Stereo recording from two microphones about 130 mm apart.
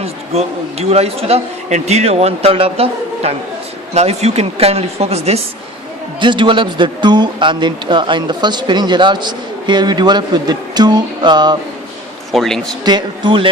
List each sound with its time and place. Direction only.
0.0 s speech: 50° right (ahead or behind)
6.1 s speech: 40° right (ahead or behind)
12.3 s a man's voice: centre (ahead or behind)
12.8 s speech: 35° right (ahead or behind)